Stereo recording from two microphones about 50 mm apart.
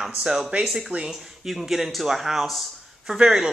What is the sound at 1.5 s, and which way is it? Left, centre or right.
A man's voice, centre.